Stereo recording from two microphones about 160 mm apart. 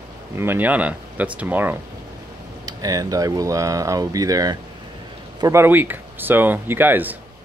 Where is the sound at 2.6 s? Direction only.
20° right (ahead or behind).